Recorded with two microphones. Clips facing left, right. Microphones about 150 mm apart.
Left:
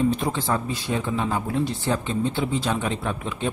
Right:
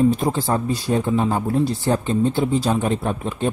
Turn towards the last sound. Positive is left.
turn(degrees=-40)  # may be behind; listen again after turning